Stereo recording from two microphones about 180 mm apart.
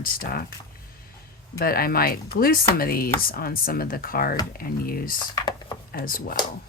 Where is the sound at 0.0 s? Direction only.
55° left (ahead or behind).